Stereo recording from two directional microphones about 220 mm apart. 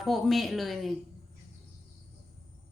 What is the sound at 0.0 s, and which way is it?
Speech, centre (ahead or behind).